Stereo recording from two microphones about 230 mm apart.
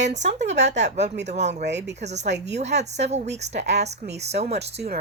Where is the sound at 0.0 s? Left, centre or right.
Right.